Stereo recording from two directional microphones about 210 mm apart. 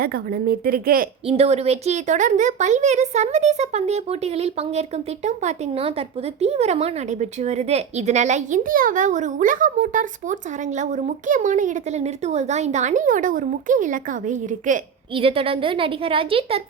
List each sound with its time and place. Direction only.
0.0 s a woman's voice: 45° right (ahead or behind)
1.3 s a woman's voice: 30° right (ahead or behind)
15.1 s a woman's voice: 25° right (ahead or behind)